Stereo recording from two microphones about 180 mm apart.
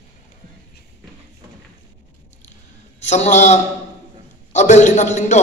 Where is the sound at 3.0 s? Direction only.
40° left (ahead or behind).